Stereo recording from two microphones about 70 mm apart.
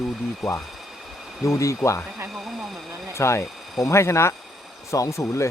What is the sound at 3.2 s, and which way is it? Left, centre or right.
Speech, left.